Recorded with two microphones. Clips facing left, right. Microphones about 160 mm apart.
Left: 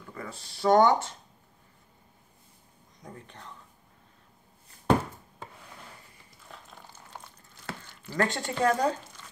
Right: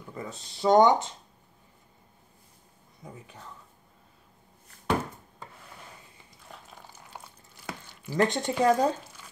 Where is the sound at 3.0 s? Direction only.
5° right (ahead or behind).